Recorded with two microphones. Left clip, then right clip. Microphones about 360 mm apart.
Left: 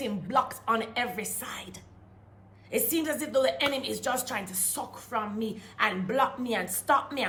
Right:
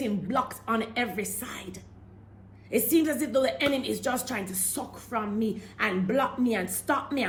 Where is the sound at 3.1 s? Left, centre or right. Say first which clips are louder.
Even; left.